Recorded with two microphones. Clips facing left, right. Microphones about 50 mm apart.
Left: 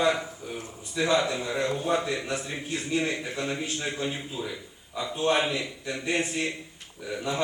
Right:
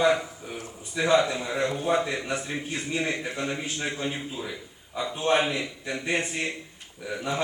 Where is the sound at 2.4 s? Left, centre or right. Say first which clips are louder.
Even; centre.